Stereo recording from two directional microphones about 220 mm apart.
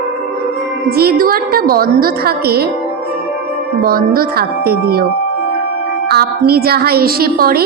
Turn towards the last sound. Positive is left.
turn(degrees=-45)  # may be behind; listen again after turning